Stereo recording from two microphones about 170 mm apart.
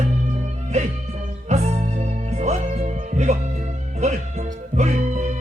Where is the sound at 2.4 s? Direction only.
40° right (ahead or behind).